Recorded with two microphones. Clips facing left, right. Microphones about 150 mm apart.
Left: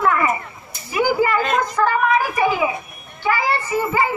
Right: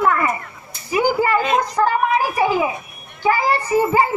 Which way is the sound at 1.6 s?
35° right (ahead or behind).